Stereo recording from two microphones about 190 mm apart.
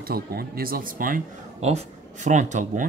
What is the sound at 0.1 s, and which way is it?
A man's voice, 55° right (ahead or behind).